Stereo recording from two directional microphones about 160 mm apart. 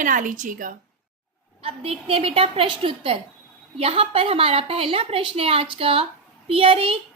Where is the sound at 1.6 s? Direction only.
35° right (ahead or behind).